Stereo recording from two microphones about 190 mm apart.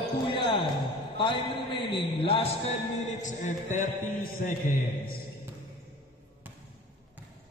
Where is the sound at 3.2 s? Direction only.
40° left (ahead or behind).